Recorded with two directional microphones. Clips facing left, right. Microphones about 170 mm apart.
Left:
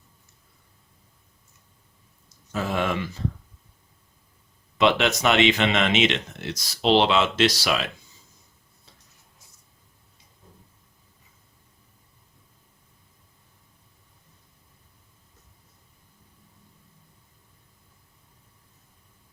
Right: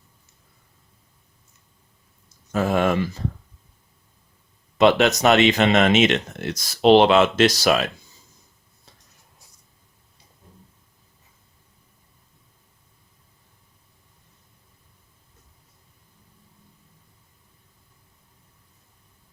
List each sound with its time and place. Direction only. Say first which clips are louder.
2.5 s speech: right 6 dB; 50° right (ahead or behind)
4.8 s speech: right 4 dB; 40° right (ahead or behind)